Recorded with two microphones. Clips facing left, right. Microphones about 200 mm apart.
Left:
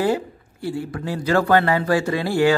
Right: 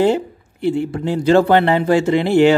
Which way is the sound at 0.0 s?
25° right (ahead or behind).